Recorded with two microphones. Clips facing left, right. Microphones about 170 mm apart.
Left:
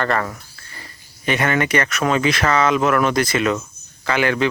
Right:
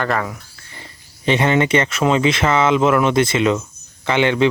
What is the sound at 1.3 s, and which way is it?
Speech, 25° right (ahead or behind).